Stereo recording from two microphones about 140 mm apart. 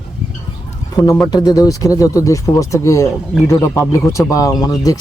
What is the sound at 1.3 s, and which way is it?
Speech, 25° left (ahead or behind).